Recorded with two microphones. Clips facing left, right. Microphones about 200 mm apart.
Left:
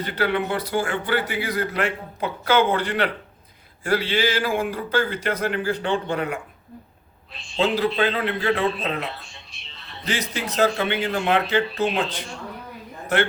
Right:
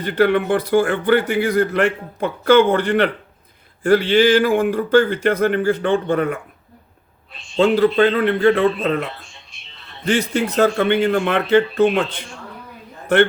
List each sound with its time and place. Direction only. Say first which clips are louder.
0.0 s speech: right 7 dB; 50° right (ahead or behind)
7.6 s speech: right 7 dB; 50° right (ahead or behind)
10.1 s speech: right 9 dB; 55° right (ahead or behind)